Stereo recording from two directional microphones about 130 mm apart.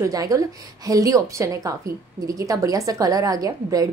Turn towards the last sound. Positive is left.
turn(degrees=-30)  # may be behind; listen again after turning